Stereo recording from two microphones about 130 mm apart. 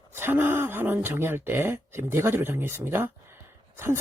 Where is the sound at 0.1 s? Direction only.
15° right (ahead or behind).